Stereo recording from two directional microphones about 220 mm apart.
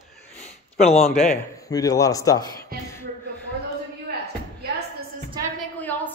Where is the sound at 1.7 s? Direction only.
15° left (ahead or behind).